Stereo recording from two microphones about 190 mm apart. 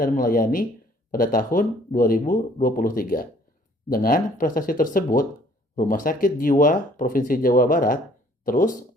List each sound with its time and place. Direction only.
0.0 s speech: 50° left (ahead or behind)